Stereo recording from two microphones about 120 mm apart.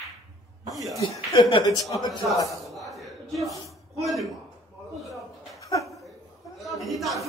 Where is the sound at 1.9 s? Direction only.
30° left (ahead or behind).